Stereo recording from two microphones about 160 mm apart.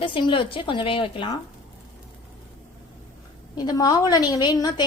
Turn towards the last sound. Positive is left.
turn(degrees=25)  # may be behind; listen again after turning